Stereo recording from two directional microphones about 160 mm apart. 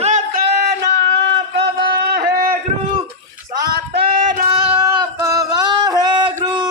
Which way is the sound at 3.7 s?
75° right (ahead or behind).